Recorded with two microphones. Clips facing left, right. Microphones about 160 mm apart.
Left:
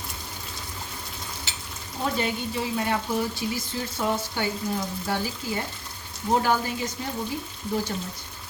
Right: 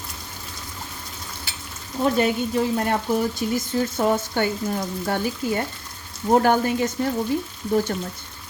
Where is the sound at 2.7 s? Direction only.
50° right (ahead or behind).